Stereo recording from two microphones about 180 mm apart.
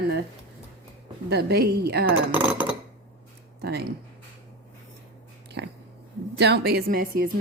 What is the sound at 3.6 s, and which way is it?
Speech, 60° right (ahead or behind).